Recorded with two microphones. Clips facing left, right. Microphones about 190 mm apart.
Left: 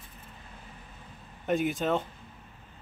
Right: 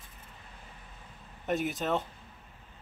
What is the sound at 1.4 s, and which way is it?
Speech, centre (ahead or behind).